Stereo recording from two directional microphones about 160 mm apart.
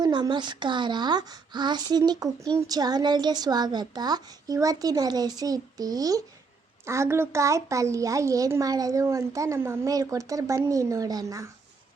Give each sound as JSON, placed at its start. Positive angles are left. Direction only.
{"t": 0.0, "sound": "a child's voice", "side_deg": -30}